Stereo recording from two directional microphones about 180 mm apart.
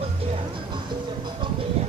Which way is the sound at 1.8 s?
30° right (ahead or behind).